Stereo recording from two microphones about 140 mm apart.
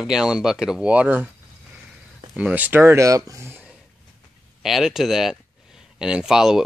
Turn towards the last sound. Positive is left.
turn(degrees=-5)  # may be behind; listen again after turning